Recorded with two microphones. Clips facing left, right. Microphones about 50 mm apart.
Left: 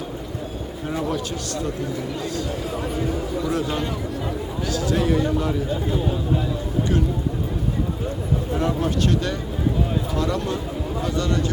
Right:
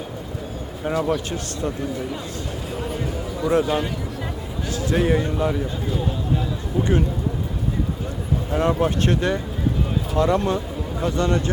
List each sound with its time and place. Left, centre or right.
1.0 s a man's voice: right
3.4 s a man's voice: right
8.5 s speech: right